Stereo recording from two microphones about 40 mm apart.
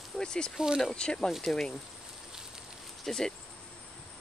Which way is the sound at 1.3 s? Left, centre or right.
Centre.